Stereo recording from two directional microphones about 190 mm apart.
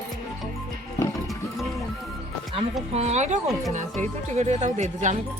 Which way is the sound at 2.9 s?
35° right (ahead or behind).